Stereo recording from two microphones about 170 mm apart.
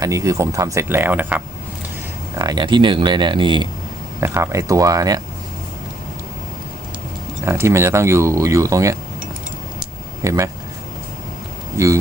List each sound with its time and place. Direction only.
0.0 s speech: 20° right (ahead or behind)
2.3 s speech: 20° right (ahead or behind)
4.2 s speech: 20° right (ahead or behind)
7.4 s speech: 15° right (ahead or behind)
10.2 s speech: 20° right (ahead or behind)